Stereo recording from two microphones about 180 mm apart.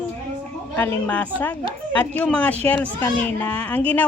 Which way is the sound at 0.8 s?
10° left (ahead or behind).